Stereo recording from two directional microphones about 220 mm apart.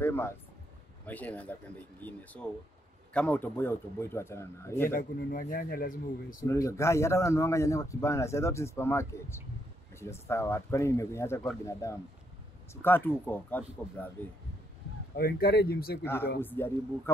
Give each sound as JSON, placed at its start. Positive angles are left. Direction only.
{"t": 0.0, "sound": "a sound", "side_deg": 10}
{"t": 1.0, "sound": "a man's voice", "side_deg": 5}
{"t": 4.9, "sound": "speech", "side_deg": 40}
{"t": 6.4, "sound": "a man's voice", "side_deg": 15}
{"t": 15.1, "sound": "speech", "side_deg": 45}
{"t": 16.0, "sound": "a man's voice", "side_deg": 10}